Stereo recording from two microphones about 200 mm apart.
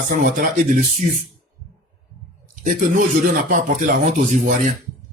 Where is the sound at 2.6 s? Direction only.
40° right (ahead or behind).